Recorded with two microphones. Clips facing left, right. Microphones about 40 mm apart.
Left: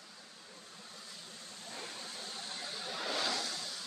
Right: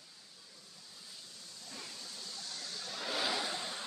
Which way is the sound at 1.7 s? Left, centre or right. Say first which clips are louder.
Left 3 dB; left.